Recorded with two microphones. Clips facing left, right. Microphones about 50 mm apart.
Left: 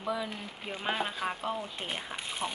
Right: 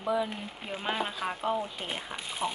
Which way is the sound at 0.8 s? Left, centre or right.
Centre.